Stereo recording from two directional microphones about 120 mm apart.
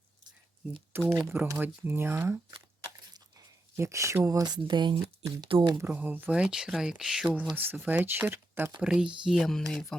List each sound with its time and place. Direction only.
0.9 s speech: 20° right (ahead or behind)
3.8 s speech: 25° right (ahead or behind); by 5.7 s 45° right (ahead or behind)
5.7 s speech: 15° right (ahead or behind)
8.8 s speech: 5° right (ahead or behind)
9.2 s a sound: centre (ahead or behind)